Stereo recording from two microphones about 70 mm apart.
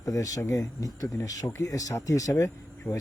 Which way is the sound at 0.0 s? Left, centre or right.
Left.